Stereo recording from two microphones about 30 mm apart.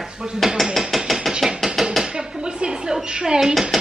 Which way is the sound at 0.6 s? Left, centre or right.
Centre.